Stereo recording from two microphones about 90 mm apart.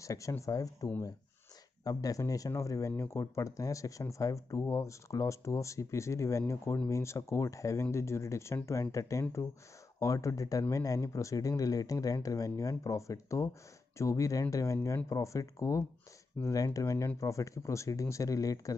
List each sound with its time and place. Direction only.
0.0 s speech: 35° left (ahead or behind)